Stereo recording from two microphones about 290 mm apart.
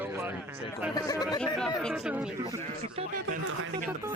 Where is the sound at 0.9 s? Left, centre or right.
Centre.